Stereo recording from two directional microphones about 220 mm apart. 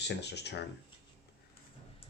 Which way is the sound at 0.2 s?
50° left (ahead or behind).